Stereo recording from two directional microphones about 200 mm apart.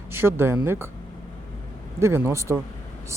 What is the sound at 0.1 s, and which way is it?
Speech, 10° right (ahead or behind).